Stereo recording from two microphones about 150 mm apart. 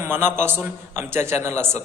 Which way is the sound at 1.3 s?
50° left (ahead or behind).